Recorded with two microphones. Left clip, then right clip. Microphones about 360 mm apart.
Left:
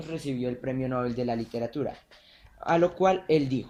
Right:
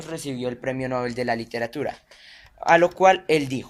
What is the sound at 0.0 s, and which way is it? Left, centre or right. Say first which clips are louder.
Speech: right 3 dB; centre.